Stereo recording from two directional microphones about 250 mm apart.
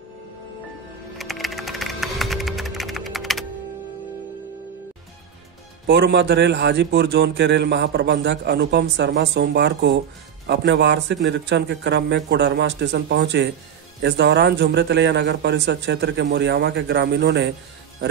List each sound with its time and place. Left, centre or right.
1.1 s computer keyboard: centre
5.9 s a man's voice: right